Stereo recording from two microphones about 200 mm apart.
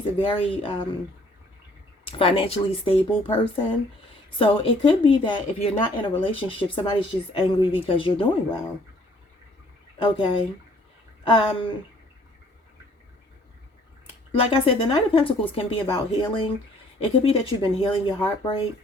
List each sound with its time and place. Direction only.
0.2 s speech: 25° left (ahead or behind)
2.0 s speech: 25° left (ahead or behind)
10.0 s speech: 25° left (ahead or behind)
14.3 s speech: 25° left (ahead or behind)